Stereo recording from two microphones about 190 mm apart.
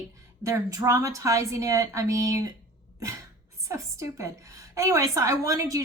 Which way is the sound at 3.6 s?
15° right (ahead or behind).